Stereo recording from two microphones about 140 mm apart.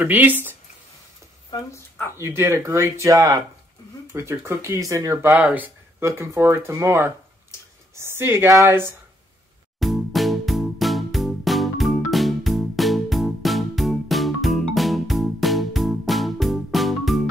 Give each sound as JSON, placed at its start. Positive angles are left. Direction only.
{"t": 0.0, "sound": "speech", "side_deg": -15}
{"t": 1.5, "sound": "speech", "side_deg": 20}
{"t": 2.1, "sound": "speech", "side_deg": -20}
{"t": 5.3, "sound": "speech", "side_deg": -10}
{"t": 9.8, "sound": "music", "side_deg": 0}